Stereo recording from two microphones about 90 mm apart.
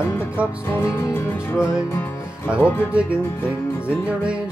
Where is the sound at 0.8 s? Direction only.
30° left (ahead or behind).